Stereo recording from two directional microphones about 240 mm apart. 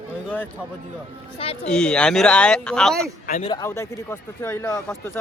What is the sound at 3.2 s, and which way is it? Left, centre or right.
Speech, left.